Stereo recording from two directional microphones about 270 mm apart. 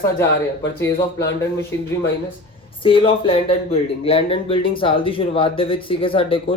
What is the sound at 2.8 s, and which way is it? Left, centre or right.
Speech, centre.